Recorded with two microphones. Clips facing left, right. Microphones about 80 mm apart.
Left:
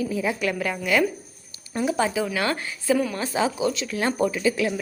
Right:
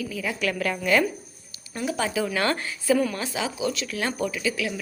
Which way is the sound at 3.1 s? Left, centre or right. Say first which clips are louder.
Left 5 dB; left.